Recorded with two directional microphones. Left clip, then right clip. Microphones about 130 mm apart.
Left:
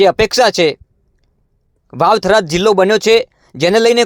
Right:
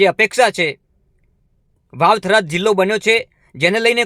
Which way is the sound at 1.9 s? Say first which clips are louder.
Left 2 dB; 25° left (ahead or behind).